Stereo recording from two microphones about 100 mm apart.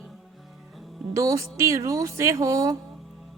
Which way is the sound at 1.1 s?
30° right (ahead or behind).